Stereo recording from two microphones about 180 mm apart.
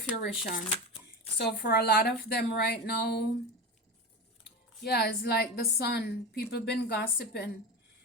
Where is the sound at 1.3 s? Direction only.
65° left (ahead or behind).